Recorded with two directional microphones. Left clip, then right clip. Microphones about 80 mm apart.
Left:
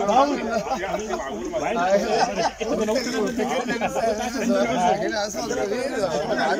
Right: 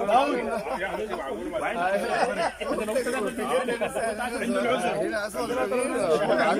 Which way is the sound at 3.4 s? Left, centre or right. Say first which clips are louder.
Left 2 dB; centre.